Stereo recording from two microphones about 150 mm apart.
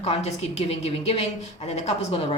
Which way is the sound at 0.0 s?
45° left (ahead or behind).